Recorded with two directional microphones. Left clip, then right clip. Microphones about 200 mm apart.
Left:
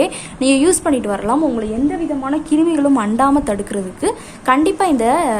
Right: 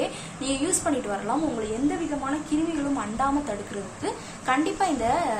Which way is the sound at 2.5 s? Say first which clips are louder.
Left 15 dB; 60° left (ahead or behind).